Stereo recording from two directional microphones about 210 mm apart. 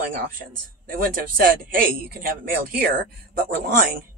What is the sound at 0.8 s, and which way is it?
Speech, 45° right (ahead or behind).